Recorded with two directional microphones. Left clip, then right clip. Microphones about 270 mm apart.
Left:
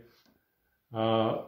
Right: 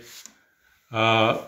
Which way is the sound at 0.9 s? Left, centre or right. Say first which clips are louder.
Right 8 dB; right.